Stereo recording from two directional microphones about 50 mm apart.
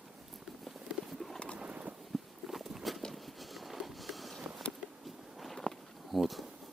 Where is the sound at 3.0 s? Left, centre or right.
Centre.